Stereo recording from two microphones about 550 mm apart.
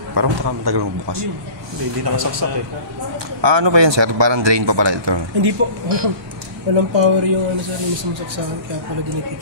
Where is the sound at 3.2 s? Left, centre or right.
Right.